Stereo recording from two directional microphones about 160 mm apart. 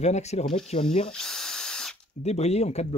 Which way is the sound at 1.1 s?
5° left (ahead or behind).